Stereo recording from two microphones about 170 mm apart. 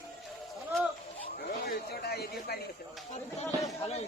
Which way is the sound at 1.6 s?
65° left (ahead or behind).